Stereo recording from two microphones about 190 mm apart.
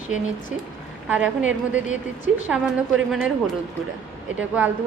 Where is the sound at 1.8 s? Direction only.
40° left (ahead or behind).